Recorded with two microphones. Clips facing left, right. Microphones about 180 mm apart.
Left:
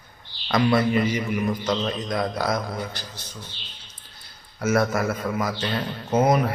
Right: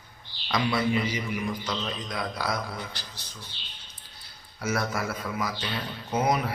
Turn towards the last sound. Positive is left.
turn(degrees=50)  # may be behind; listen again after turning